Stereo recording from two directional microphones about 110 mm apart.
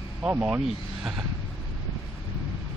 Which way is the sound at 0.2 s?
10° right (ahead or behind).